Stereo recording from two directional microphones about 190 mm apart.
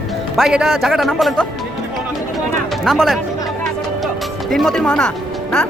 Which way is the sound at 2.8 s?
Centre (ahead or behind).